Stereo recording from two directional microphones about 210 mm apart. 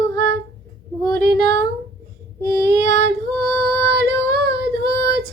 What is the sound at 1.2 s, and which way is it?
Child singing, 55° right (ahead or behind).